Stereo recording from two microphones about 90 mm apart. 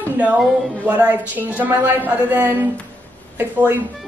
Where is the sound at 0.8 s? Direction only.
20° right (ahead or behind).